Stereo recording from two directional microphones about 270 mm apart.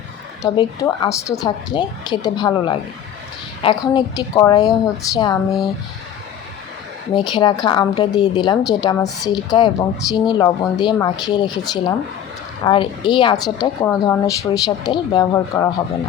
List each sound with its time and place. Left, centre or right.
0.4 s speech: centre
7.1 s speech: centre